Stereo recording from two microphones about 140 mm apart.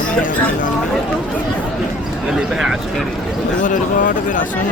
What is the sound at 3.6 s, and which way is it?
Speech, 65° left (ahead or behind).